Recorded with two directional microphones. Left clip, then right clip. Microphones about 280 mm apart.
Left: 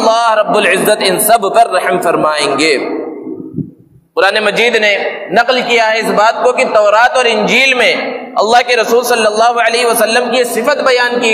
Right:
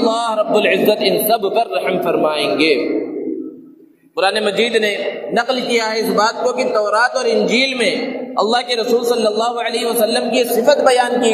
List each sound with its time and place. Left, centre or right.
0.0 s a man's voice: left
4.2 s a man's voice: left